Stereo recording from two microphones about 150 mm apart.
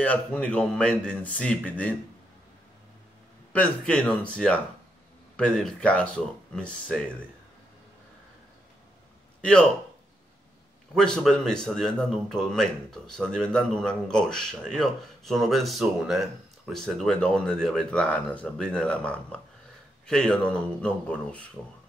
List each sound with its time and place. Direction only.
0.0 s a man's voice: 10° left (ahead or behind)
3.5 s a man's voice: 10° left (ahead or behind)
9.4 s a man's voice: 5° left (ahead or behind)
11.0 s a man's voice: 5° left (ahead or behind)